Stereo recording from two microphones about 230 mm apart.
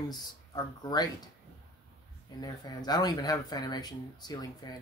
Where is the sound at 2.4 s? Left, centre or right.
Centre.